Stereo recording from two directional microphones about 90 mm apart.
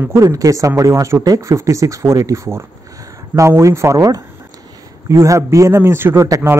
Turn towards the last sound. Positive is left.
turn(degrees=-30)  # may be behind; listen again after turning